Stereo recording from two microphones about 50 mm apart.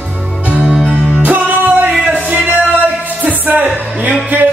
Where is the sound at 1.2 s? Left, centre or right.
Right.